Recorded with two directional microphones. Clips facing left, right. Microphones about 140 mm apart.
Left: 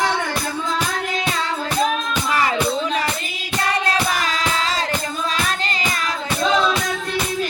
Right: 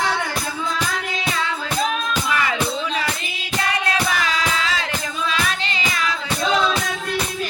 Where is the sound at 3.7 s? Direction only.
40° left (ahead or behind).